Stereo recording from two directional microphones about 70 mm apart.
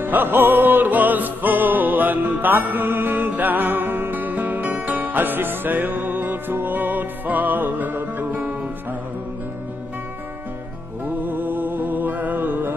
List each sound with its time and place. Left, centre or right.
0.0 s music: right
11.1 s music: right